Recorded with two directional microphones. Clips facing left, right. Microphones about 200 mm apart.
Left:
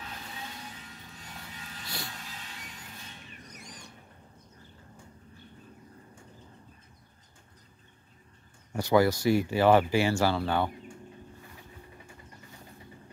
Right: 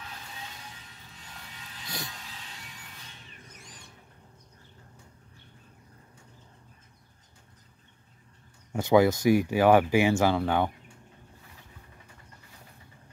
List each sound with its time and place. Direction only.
8.7 s speech: 20° right (ahead or behind)